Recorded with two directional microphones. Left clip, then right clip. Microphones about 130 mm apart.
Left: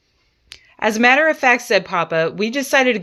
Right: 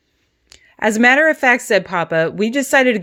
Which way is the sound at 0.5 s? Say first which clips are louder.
Right 2 dB; 45° right (ahead or behind).